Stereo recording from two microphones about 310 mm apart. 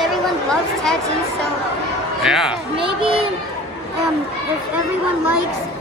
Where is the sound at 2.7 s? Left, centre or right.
Centre.